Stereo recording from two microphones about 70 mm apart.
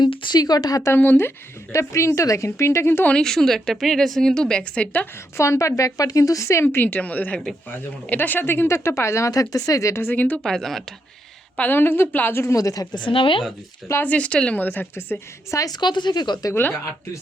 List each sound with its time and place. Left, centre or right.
0.0 s speech: left
0.9 s a woman's voice: left
1.7 s speech: left
3.1 s a woman's voice: centre
5.4 s speech: left
6.7 s a woman's voice: left
10.0 s a woman's voice: left
10.4 s speech: centre
11.5 s a woman's voice: left
12.5 s a woman's voice: left
14.0 s a woman's voice: centre
14.6 s a woman's voice: left
15.5 s a woman's voice: left